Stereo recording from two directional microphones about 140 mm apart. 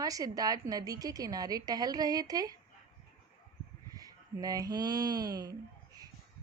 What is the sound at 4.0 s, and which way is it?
Speech, 25° right (ahead or behind).